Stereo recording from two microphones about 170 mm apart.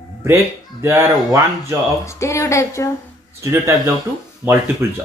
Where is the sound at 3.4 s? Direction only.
15° right (ahead or behind).